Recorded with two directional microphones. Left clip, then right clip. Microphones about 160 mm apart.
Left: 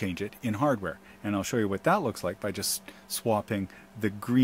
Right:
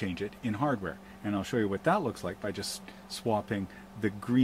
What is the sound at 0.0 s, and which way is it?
Speech, 60° left (ahead or behind).